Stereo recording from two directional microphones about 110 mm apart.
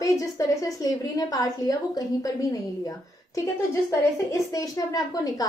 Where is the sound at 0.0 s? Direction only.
30° left (ahead or behind).